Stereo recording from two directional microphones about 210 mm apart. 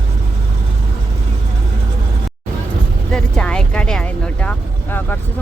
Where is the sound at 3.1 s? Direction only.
5° left (ahead or behind).